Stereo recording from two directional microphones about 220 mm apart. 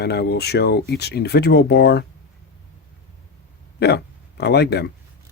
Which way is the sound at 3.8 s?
50° left (ahead or behind).